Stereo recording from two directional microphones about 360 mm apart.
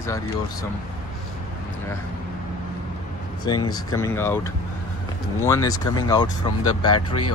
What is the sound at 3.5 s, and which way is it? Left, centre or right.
Speech, centre.